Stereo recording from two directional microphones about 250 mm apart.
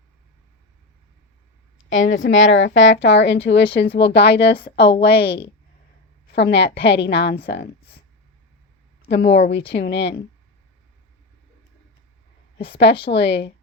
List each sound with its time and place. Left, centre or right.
1.9 s a woman's voice: left
9.0 s a woman's voice: left
12.5 s a woman's voice: left
12.8 s a woman's voice: left